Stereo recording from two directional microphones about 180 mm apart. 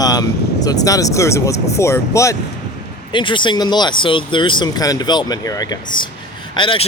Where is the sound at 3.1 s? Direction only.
25° left (ahead or behind).